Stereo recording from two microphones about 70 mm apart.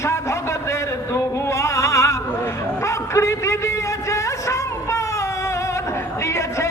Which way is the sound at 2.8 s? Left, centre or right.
Left.